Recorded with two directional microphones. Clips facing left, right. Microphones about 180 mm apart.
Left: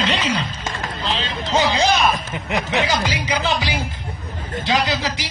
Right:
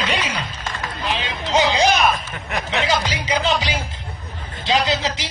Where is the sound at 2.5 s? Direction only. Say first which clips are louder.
Left 3 dB; 20° left (ahead or behind).